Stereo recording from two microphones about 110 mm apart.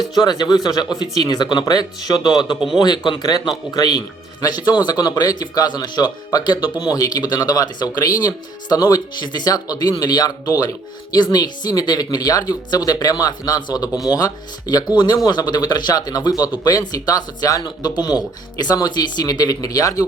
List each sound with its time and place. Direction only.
0.1 s speech: 40° left (ahead or behind)